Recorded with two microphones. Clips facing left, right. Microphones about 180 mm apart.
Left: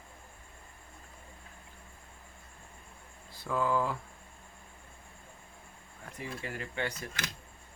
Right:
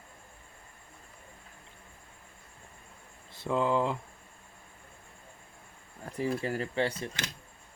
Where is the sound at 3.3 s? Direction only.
25° right (ahead or behind).